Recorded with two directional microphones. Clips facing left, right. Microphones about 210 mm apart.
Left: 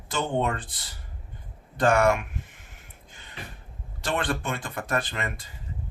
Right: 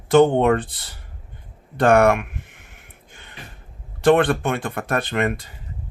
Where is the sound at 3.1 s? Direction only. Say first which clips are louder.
Right 5 dB; 60° right (ahead or behind).